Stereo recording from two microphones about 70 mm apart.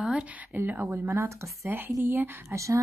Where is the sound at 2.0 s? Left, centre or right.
Right.